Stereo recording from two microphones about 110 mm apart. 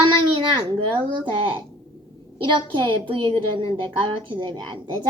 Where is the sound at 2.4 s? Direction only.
45° right (ahead or behind).